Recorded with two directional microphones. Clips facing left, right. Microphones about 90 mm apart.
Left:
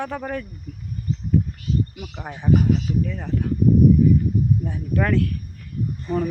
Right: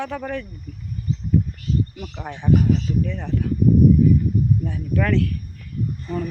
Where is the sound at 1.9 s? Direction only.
10° left (ahead or behind).